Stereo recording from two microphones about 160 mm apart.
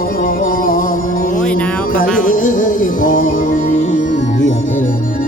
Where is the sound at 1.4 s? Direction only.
10° left (ahead or behind).